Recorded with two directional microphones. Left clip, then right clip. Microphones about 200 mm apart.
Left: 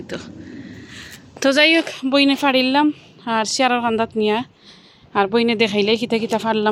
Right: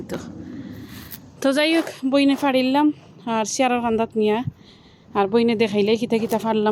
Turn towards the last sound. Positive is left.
turn(degrees=0)  # may be behind; listen again after turning